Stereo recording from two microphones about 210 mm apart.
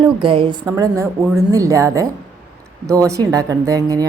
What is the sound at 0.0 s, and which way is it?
A woman's voice, 25° right (ahead or behind).